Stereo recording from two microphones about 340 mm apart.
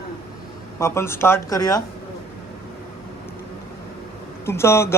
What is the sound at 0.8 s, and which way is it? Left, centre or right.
A man's voice, centre.